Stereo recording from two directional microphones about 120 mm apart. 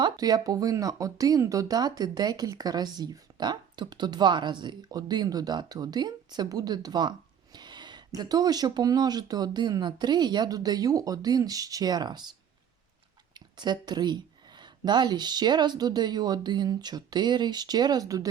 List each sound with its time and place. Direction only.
0.0 s speech: 35° right (ahead or behind)
13.3 s speech: 35° right (ahead or behind)